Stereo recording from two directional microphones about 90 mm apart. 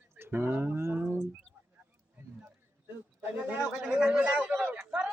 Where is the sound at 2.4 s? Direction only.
20° right (ahead or behind).